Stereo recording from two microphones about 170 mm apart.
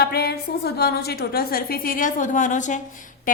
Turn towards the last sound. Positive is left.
turn(degrees=50)  # may be behind; listen again after turning